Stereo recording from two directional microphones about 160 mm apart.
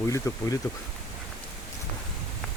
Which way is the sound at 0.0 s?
20° left (ahead or behind).